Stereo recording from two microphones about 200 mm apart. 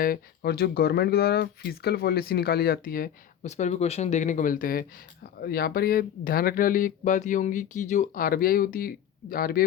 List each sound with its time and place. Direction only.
0.0 s speech: 50° left (ahead or behind)
3.5 s speech: 35° left (ahead or behind)